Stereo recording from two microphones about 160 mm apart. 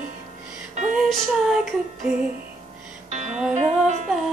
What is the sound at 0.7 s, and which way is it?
Music, 50° right (ahead or behind).